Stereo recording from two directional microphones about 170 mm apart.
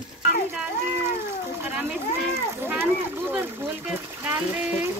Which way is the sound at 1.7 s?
10° right (ahead or behind).